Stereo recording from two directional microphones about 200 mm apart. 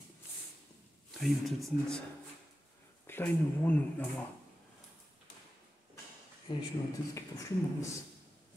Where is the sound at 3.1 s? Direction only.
10° left (ahead or behind).